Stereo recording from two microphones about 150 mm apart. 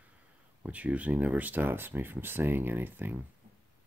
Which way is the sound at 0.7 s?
10° right (ahead or behind).